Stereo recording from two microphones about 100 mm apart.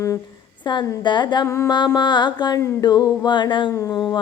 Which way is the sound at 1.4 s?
30° left (ahead or behind).